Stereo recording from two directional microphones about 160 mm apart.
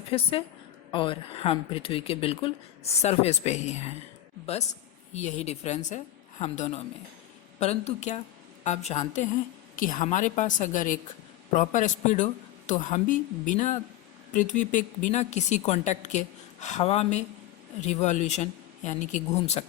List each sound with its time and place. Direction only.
0.1 s a woman's voice: 35° left (ahead or behind)
9.7 s a woman's voice: 60° left (ahead or behind)